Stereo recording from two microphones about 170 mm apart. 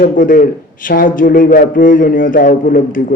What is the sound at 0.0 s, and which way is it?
A man's voice, 55° left (ahead or behind).